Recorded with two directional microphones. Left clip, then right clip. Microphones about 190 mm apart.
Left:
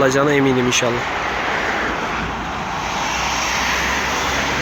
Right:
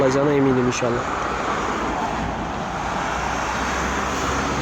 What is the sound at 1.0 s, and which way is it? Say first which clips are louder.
Waves: left 3 dB; 60° right (ahead or behind).